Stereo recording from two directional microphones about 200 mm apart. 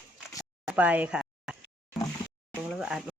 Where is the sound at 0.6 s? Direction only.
5° right (ahead or behind).